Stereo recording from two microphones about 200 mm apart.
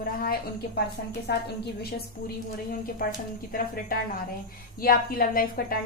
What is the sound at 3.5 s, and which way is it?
A woman's voice, 45° left (ahead or behind).